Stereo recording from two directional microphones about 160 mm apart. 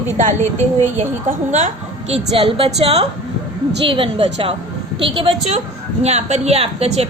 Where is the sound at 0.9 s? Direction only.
50° right (ahead or behind).